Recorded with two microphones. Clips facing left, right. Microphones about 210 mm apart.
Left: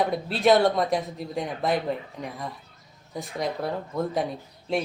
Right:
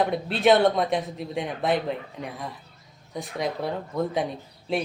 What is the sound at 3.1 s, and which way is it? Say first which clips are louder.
A man's voice: right 1 dB; centre (ahead or behind).